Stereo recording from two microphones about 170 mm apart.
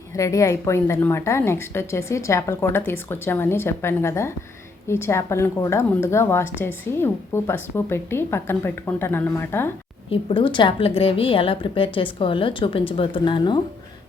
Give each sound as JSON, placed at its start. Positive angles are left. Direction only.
{"t": 0.2, "sound": "a woman's voice", "side_deg": 20}
{"t": 10.1, "sound": "a woman's voice", "side_deg": 30}